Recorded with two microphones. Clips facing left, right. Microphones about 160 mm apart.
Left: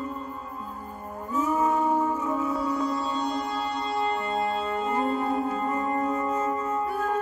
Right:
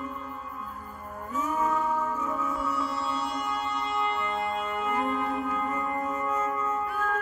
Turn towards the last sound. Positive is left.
turn(degrees=30)  # may be behind; listen again after turning